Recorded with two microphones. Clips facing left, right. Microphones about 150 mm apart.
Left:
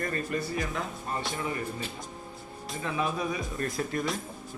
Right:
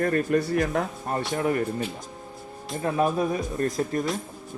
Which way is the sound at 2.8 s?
50° right (ahead or behind).